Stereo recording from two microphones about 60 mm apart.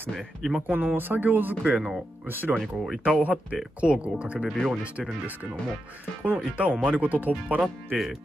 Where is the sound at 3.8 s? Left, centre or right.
Centre.